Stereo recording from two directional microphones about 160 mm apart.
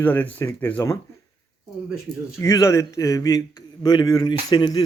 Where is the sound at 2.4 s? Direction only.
20° left (ahead or behind).